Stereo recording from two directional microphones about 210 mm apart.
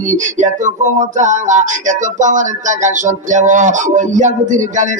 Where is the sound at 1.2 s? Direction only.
35° right (ahead or behind).